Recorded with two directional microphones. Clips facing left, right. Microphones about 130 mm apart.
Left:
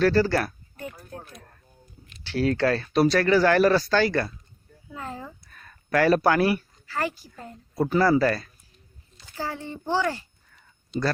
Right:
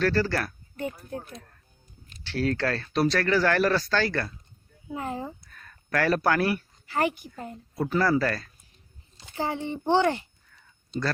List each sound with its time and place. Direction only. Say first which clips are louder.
0.0 s speech: left 4 dB; 15° left (ahead or behind)
1.1 s a sound: right 4 dB; 25° right (ahead or behind)
2.2 s speech: left 4 dB; 10° left (ahead or behind)
4.9 s a sound: right 4 dB; 20° right (ahead or behind)
5.6 s speech: left 5 dB; 10° left (ahead or behind)
6.8 s speech: right 5 dB; 20° right (ahead or behind)
7.9 s speech: left 3 dB; 10° left (ahead or behind)
9.2 s speech: right 3 dB; 20° right (ahead or behind)